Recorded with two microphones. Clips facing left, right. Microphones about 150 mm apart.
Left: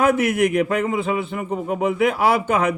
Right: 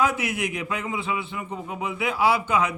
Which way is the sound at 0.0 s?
55° left (ahead or behind).